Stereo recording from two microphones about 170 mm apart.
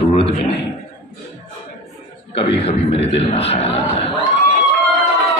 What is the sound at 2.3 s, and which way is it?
A man's voice, 35° left (ahead or behind).